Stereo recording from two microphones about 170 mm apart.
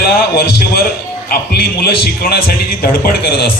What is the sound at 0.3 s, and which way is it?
A man's voice, 65° left (ahead or behind).